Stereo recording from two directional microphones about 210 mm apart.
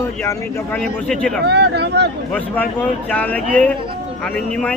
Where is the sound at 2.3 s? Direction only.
5° left (ahead or behind).